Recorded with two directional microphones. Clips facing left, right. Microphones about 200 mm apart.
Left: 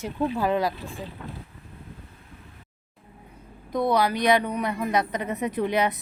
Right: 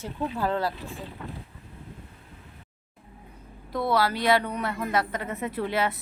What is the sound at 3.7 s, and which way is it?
Speech, 15° left (ahead or behind).